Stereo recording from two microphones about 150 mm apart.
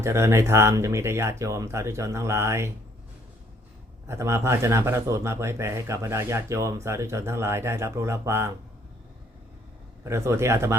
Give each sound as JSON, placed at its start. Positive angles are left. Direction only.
{"t": 0.0, "sound": "speech", "side_deg": -20}
{"t": 4.0, "sound": "speech", "side_deg": -20}
{"t": 10.0, "sound": "speech", "side_deg": -20}